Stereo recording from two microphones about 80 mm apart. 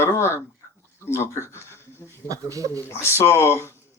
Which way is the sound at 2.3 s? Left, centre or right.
Right.